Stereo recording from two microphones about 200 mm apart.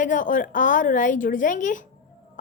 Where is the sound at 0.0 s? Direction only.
40° left (ahead or behind).